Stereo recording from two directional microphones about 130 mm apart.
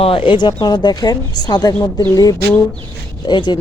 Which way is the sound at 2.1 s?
30° left (ahead or behind).